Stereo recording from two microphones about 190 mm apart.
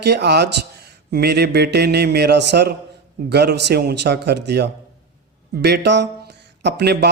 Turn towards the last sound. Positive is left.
turn(degrees=-60)  # may be behind; listen again after turning